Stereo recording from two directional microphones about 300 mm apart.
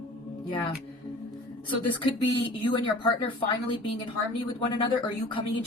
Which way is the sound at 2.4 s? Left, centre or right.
Centre.